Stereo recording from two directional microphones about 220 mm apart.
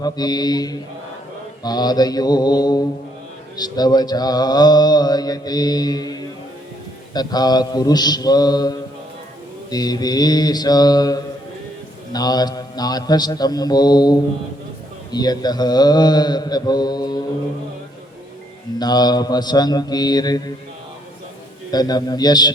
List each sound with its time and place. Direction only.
0.0 s mantra: 20° left (ahead or behind)
15.1 s speech: 20° left (ahead or behind)
18.8 s speech: 20° left (ahead or behind)
21.7 s mantra: 20° left (ahead or behind)